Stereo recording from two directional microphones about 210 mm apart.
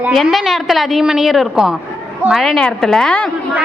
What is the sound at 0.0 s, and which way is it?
A child's voice, centre (ahead or behind).